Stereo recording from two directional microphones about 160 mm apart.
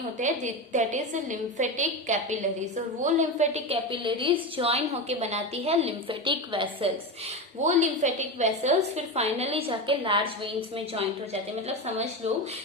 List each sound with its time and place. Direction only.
0.2 s a woman's voice: 50° right (ahead or behind); by 6.9 s 30° right (ahead or behind)
7.6 s a woman's voice: 50° right (ahead or behind); by 10.3 s 35° right (ahead or behind)